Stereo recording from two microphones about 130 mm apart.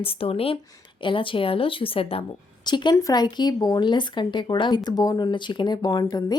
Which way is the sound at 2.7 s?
35° left (ahead or behind).